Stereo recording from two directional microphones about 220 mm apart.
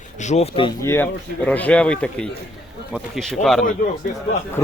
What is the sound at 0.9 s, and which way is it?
Speech, 10° left (ahead or behind).